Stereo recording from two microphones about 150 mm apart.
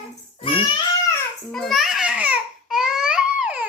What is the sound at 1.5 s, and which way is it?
Babbling, centre (ahead or behind).